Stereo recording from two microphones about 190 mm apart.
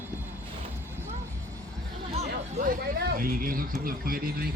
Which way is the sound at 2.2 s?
55° right (ahead or behind).